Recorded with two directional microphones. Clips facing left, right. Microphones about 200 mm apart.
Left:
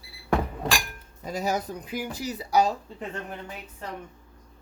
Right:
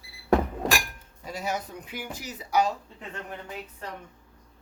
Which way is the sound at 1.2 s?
40° left (ahead or behind).